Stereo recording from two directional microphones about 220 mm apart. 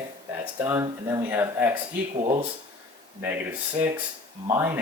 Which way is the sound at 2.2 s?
20° right (ahead or behind).